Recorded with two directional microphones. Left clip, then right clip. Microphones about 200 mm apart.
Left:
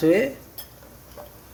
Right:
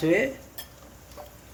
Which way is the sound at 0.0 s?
25° left (ahead or behind).